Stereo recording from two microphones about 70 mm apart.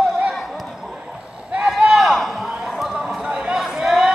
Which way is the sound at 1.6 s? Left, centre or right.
Centre.